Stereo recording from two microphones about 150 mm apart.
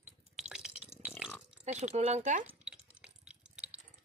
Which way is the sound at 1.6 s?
50° right (ahead or behind).